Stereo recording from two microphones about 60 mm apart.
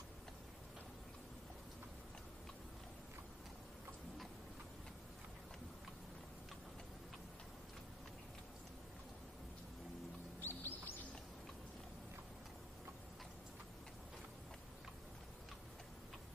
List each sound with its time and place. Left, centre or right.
10.4 s bird: left